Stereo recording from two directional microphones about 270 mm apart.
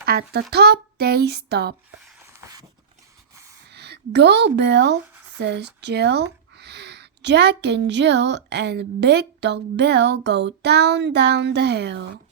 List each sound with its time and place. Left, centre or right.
0.0 s speech: right
2.3 s a sound: centre
3.7 s a woman's voice: right